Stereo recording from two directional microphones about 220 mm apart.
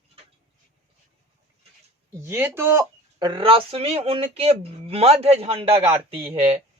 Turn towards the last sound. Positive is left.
turn(degrees=-25)  # may be behind; listen again after turning